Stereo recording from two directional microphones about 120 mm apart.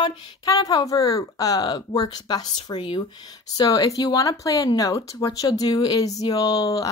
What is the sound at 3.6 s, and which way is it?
Speech, 30° left (ahead or behind).